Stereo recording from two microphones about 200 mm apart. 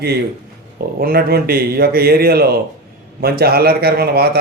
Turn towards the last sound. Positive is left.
turn(degrees=-50)  # may be behind; listen again after turning